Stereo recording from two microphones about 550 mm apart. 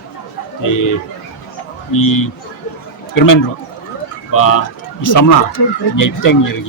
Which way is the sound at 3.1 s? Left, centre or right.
Left.